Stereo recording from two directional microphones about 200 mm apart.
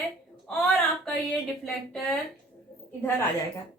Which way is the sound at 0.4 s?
5° left (ahead or behind).